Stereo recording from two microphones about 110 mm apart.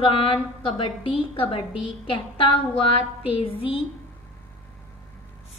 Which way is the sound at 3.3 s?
55° left (ahead or behind).